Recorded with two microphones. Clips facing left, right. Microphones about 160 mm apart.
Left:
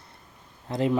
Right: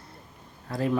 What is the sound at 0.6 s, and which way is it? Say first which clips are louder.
Speech: left 2 dB; 20° left (ahead or behind).